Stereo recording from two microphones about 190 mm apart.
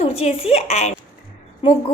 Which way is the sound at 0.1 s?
35° left (ahead or behind).